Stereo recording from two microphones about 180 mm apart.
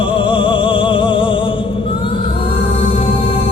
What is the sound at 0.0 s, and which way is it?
Music, 30° left (ahead or behind).